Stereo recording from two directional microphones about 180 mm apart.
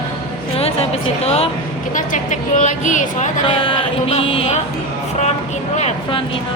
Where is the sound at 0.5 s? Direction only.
35° left (ahead or behind).